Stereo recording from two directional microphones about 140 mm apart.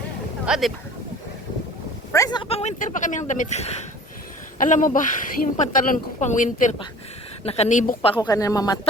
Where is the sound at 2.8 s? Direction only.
65° left (ahead or behind).